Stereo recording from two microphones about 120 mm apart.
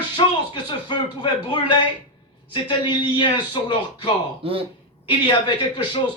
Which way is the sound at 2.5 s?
40° left (ahead or behind).